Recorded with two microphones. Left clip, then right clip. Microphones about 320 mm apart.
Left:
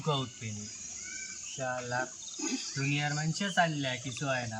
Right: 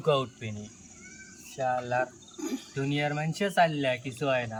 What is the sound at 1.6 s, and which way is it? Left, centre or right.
Speech, centre.